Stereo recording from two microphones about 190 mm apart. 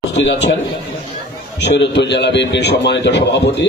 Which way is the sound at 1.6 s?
65° left (ahead or behind).